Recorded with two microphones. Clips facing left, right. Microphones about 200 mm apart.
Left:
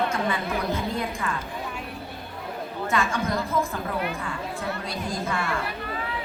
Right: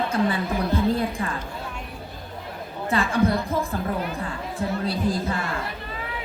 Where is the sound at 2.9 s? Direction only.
35° right (ahead or behind).